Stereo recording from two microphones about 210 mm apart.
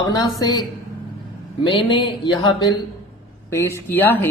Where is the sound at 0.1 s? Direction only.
20° left (ahead or behind).